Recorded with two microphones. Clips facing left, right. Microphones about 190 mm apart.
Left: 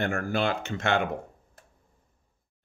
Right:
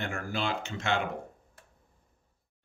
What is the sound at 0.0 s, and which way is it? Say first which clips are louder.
Speech: left 6 dB; 55° left (ahead or behind).